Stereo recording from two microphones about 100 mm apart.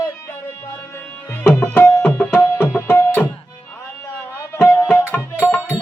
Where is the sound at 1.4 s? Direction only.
25° left (ahead or behind).